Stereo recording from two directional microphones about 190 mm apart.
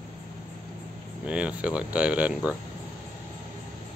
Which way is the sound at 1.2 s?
5° right (ahead or behind).